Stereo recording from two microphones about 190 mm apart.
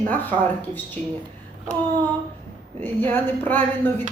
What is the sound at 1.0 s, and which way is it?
Speech, 35° right (ahead or behind).